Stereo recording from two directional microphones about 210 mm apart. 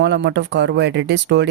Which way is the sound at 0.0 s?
55° right (ahead or behind).